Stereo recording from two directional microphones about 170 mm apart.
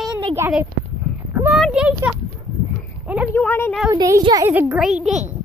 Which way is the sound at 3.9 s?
20° right (ahead or behind).